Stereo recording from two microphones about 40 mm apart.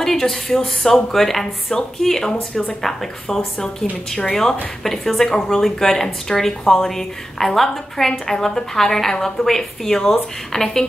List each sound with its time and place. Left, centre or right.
0.0 s speech: centre